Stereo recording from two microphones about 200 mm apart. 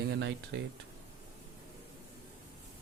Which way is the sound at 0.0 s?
60° right (ahead or behind).